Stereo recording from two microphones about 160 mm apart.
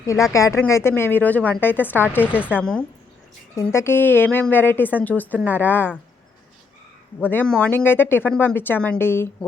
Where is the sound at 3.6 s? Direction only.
15° left (ahead or behind).